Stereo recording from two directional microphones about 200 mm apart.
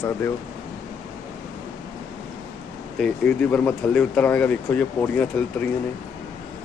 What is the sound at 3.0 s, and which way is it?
Speech, 5° left (ahead or behind).